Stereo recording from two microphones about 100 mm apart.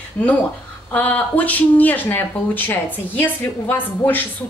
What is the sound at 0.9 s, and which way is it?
A woman's voice, 15° left (ahead or behind).